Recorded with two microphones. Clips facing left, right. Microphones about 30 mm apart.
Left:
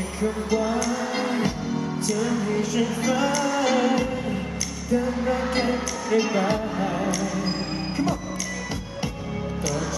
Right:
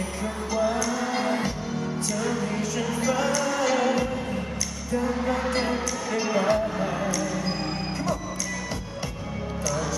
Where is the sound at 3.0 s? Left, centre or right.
Centre.